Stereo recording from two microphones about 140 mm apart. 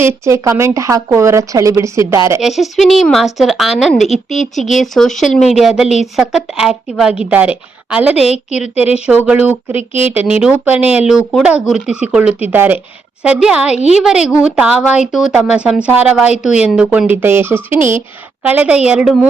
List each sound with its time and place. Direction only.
0.0 s speech: 20° right (ahead or behind)
2.4 s a woman's voice: centre (ahead or behind)
8.3 s a woman's voice: 55° left (ahead or behind)
9.0 s a woman's voice: 10° right (ahead or behind)